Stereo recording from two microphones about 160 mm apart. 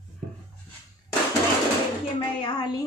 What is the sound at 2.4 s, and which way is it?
Music, 25° left (ahead or behind).